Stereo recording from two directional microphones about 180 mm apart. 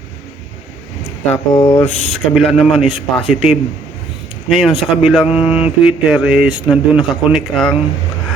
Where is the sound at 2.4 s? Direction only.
Centre (ahead or behind).